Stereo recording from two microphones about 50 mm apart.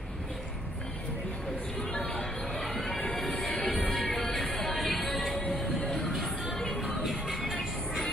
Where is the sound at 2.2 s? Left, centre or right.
Centre.